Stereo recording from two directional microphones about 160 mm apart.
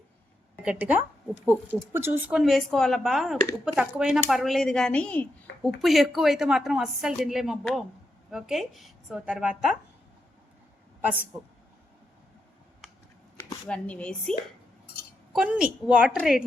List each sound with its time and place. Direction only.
0.6 s a woman's voice: 10° right (ahead or behind)
2.4 s a woman's voice: centre (ahead or behind)
13.7 s speech: 5° left (ahead or behind)
15.3 s a woman's voice: 5° right (ahead or behind)